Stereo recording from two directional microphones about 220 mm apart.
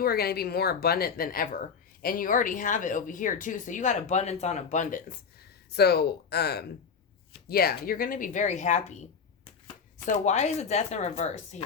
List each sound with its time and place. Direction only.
0.0 s speech: 45° left (ahead or behind)
10.1 s speech: 30° left (ahead or behind)